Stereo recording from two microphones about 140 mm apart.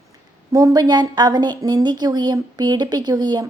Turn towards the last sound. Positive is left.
turn(degrees=-30)  # may be behind; listen again after turning